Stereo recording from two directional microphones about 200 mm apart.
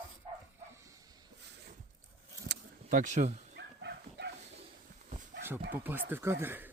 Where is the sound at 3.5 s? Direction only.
55° right (ahead or behind).